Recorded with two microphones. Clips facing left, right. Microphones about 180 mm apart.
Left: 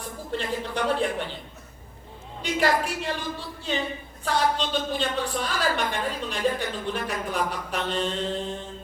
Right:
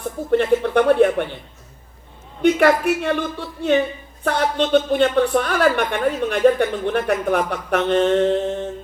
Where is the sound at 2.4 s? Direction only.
60° right (ahead or behind).